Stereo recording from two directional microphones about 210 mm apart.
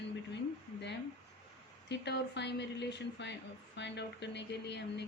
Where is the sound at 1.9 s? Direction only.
55° left (ahead or behind).